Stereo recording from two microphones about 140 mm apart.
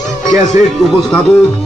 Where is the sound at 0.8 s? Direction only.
Centre (ahead or behind).